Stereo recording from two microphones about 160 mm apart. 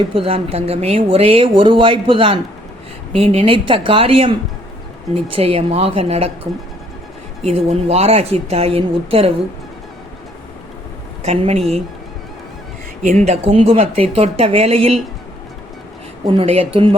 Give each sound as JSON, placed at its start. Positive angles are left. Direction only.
{"t": 0.1, "sound": "speech", "side_deg": -35}
{"t": 7.4, "sound": "speech", "side_deg": -40}
{"t": 11.2, "sound": "speech", "side_deg": -40}
{"t": 13.0, "sound": "speech", "side_deg": -50}
{"t": 16.2, "sound": "speech", "side_deg": -30}